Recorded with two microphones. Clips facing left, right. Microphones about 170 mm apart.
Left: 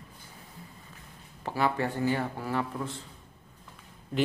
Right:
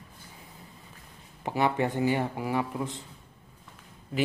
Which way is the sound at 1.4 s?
20° right (ahead or behind).